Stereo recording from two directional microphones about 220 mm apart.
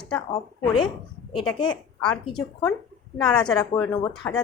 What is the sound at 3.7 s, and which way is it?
Speech, 15° left (ahead or behind).